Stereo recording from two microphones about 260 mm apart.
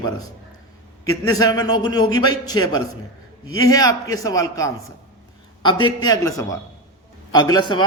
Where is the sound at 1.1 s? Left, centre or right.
Centre.